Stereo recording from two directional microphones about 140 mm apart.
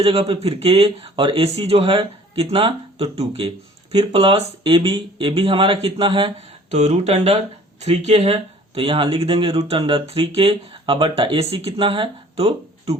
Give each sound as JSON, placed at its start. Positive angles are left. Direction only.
{"t": 0.0, "sound": "speech", "side_deg": -45}